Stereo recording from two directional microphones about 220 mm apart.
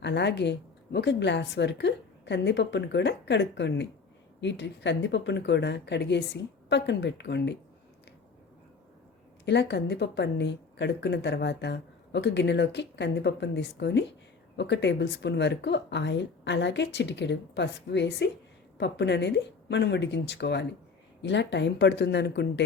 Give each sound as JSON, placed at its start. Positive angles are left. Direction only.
{"t": 0.0, "sound": "a woman's voice", "side_deg": 50}
{"t": 9.5, "sound": "a woman's voice", "side_deg": 50}